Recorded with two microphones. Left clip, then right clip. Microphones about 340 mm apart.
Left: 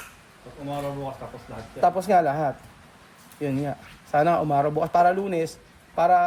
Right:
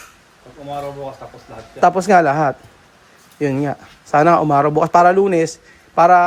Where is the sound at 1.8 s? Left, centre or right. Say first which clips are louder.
Right 8 dB; right.